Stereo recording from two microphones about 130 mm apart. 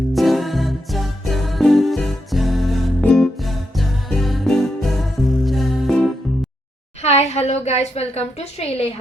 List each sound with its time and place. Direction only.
0.1 s music: centre (ahead or behind)
7.0 s a woman's voice: 55° left (ahead or behind)